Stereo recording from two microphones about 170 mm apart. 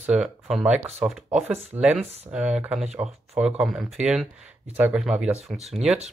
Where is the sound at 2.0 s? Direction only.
40° right (ahead or behind).